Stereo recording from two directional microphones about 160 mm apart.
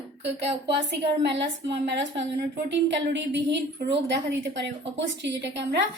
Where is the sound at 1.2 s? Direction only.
90° right.